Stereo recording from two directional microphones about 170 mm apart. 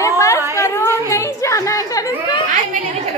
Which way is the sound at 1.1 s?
15° left (ahead or behind).